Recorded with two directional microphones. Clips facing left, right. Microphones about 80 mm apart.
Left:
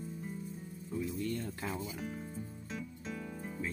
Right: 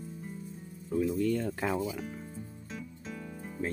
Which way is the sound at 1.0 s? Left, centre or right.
Right.